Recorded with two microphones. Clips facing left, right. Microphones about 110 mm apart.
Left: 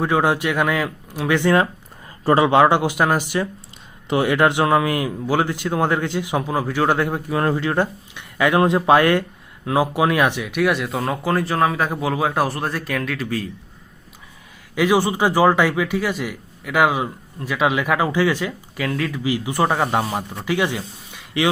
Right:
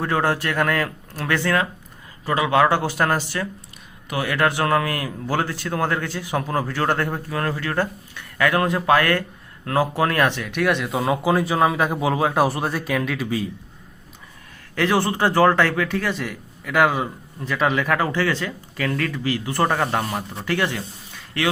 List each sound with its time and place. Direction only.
0.0 s speech: 15° left (ahead or behind)
2.2 s speech: 30° left (ahead or behind); by 13.5 s 5° right (ahead or behind)
14.8 s speech: 10° left (ahead or behind)